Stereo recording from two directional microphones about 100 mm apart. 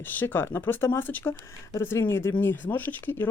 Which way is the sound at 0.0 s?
20° left (ahead or behind).